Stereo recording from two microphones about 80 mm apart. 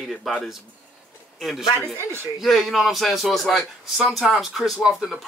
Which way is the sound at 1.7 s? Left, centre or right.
Right.